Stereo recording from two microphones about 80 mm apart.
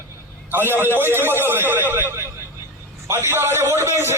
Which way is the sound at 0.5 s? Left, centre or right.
Right.